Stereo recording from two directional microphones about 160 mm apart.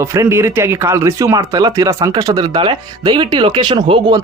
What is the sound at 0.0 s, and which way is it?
Speech, 15° right (ahead or behind).